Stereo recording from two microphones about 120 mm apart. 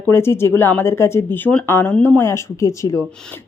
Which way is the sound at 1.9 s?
10° left (ahead or behind).